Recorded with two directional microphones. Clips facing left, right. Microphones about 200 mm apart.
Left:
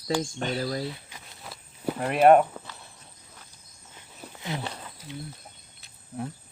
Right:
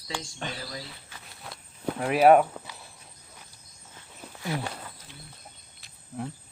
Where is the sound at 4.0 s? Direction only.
20° left (ahead or behind).